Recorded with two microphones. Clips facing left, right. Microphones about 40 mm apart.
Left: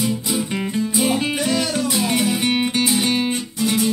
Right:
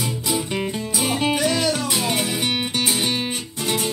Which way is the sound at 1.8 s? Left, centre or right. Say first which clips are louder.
Left 2 dB; right.